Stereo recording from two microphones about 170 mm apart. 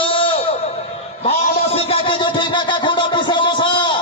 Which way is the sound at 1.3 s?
35° left (ahead or behind).